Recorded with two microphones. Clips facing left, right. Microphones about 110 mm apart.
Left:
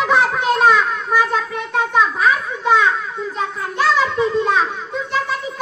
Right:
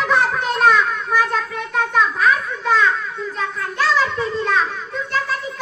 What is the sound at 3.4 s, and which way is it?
Children playing, 15° left (ahead or behind).